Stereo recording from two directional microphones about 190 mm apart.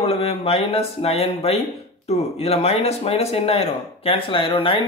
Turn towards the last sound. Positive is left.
turn(degrees=30)  # may be behind; listen again after turning